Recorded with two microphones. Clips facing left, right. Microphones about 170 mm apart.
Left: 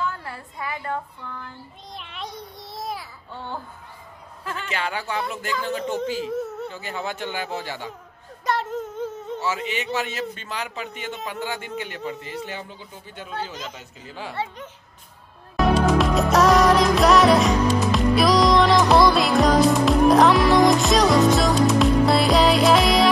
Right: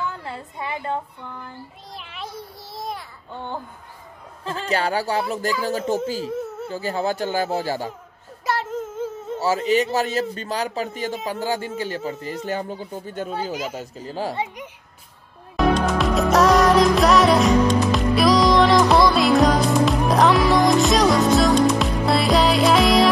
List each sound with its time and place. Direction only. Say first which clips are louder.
0.0 s a woman's voice: even; 20° right (ahead or behind)
2.0 s a sound: right 1 dB; centre (ahead or behind)
3.3 s speech: right 2 dB; 20° right (ahead or behind)
4.5 s speech: right 6 dB; 35° right (ahead or behind)
6.3 s a sound: left 1 dB; centre (ahead or behind)
6.7 s speech: right 7 dB; 35° right (ahead or behind)
8.5 s child singing: even; centre (ahead or behind)
9.4 s speech: right 9 dB; 40° right (ahead or behind)
13.3 s speech: right 3 dB; 10° right (ahead or behind)
13.7 s speech: right 8 dB; 35° right (ahead or behind)
14.3 s speech: right 2 dB; 15° right (ahead or behind)
15.5 s music: left 1 dB; centre (ahead or behind)